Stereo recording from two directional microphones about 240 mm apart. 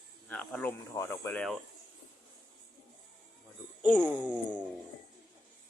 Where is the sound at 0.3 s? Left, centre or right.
Centre.